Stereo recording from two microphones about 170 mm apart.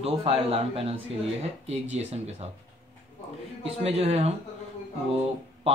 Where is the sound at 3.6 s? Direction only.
35° right (ahead or behind).